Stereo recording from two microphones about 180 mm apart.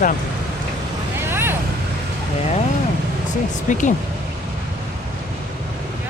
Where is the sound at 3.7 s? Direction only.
45° left (ahead or behind).